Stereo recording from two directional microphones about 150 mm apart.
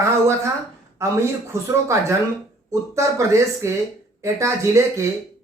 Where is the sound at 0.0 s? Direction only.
20° right (ahead or behind).